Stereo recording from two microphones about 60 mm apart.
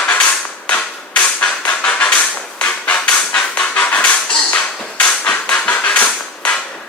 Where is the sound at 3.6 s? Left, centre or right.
Left.